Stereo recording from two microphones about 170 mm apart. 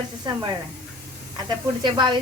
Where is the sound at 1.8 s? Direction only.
25° right (ahead or behind).